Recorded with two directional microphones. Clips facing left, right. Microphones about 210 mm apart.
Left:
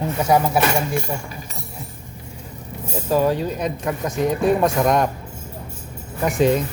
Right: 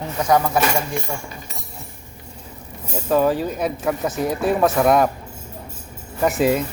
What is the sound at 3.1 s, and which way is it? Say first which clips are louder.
Speech: right 1 dB; centre (ahead or behind).